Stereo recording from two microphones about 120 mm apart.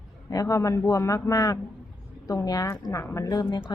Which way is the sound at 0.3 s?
30° left (ahead or behind).